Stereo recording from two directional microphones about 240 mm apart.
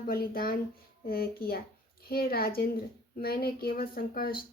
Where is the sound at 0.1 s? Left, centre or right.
Left.